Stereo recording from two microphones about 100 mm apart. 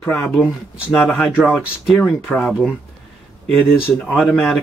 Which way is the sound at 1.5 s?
5° left (ahead or behind).